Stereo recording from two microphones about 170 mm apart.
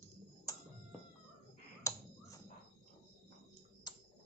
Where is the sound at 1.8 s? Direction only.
20° left (ahead or behind).